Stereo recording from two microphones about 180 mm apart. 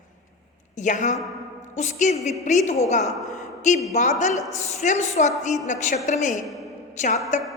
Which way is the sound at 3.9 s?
40° left (ahead or behind).